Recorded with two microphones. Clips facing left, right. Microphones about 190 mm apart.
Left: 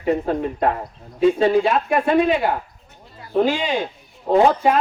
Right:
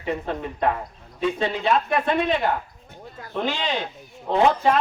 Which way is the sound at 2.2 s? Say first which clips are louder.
Left 4 dB; 10° left (ahead or behind).